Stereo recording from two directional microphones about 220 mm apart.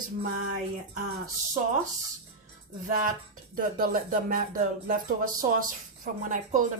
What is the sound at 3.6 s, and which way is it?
A woman's voice, 40° right (ahead or behind).